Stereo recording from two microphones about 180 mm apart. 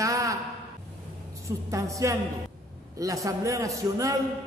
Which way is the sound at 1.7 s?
20° right (ahead or behind).